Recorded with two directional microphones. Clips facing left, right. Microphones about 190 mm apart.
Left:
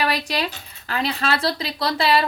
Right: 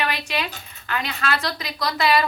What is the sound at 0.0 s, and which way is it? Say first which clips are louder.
Speech: left 3 dB; 35° left (ahead or behind).